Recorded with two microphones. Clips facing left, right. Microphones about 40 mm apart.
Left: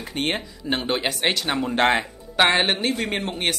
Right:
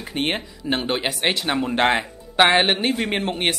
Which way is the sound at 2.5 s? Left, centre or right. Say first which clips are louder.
Right 3 dB; centre.